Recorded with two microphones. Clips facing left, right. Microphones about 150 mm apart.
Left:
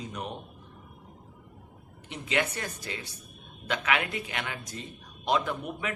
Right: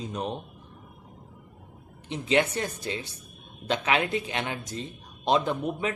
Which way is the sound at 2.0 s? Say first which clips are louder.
Right 6 dB; 25° right (ahead or behind).